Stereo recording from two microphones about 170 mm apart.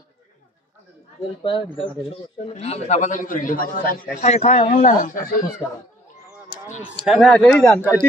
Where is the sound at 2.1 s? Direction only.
40° left (ahead or behind).